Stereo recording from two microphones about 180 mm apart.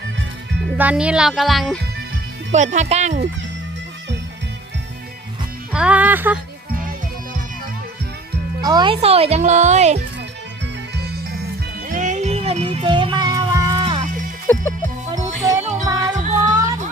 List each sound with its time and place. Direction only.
0.8 s speech: 5° right (ahead or behind)
2.5 s speech: 40° right (ahead or behind)
5.7 s speech: 5° right (ahead or behind)
8.6 s speech: 25° right (ahead or behind); by 10.0 s 40° right (ahead or behind)
11.9 s music: 45° right (ahead or behind); by 14.0 s 25° right (ahead or behind)
14.4 s music: 15° left (ahead or behind)
15.1 s music: 15° right (ahead or behind)